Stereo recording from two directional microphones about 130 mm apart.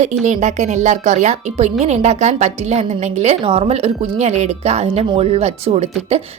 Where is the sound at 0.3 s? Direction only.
65° right (ahead or behind).